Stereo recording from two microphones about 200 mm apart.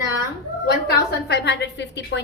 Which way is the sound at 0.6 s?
55° left (ahead or behind).